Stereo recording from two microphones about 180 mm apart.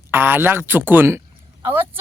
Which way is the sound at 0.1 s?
10° right (ahead or behind).